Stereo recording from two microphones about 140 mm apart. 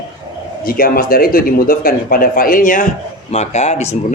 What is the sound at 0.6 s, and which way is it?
Speech, 90° left.